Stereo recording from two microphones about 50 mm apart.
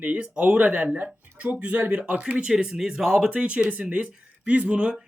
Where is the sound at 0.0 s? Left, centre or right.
Right.